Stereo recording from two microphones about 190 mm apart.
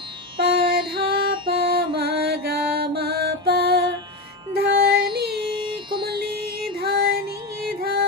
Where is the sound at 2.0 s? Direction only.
55° right (ahead or behind).